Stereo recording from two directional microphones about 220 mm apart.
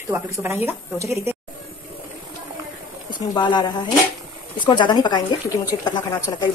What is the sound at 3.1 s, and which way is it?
A woman's voice, 20° left (ahead or behind).